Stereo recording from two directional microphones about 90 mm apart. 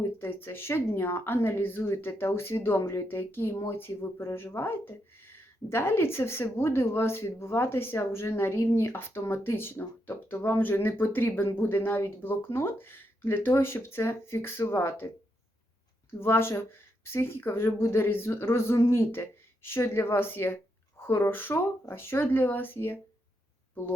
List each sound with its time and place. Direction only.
0.0 s speech: 25° left (ahead or behind)
16.2 s speech: 25° left (ahead or behind)